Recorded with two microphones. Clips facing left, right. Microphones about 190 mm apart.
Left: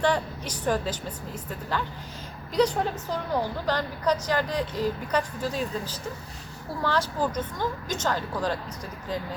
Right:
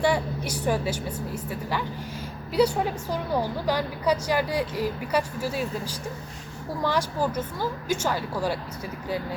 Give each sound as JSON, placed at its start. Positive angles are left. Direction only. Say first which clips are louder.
{"t": 0.0, "sound": "a woman's voice", "louder": "right 1 dB", "side_deg": -10}